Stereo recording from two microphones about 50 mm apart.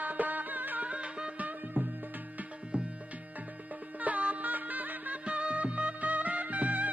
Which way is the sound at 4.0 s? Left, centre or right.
Right.